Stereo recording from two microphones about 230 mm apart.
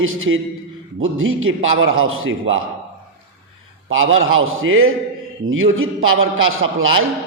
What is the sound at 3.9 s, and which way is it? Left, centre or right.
A man's voice, right.